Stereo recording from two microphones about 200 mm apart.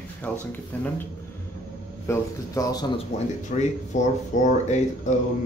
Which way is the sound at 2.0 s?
15° left (ahead or behind).